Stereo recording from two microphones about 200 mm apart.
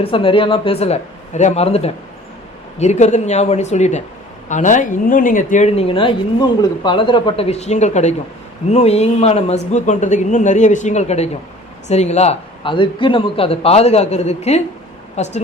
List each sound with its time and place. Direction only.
0.0 s a man's voice: 25° left (ahead or behind)